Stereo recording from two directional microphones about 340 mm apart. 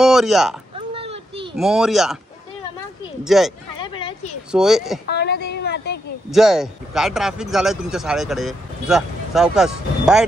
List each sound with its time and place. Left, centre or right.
0.0 s speech: centre
0.7 s burping: centre
1.6 s a man's voice: centre
3.3 s a man's voice: centre
3.8 s a sound: centre
4.5 s a man's voice: centre
5.1 s a sound: left
6.3 s a man's voice: centre